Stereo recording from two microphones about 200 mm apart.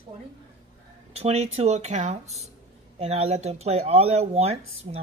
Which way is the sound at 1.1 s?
30° right (ahead or behind).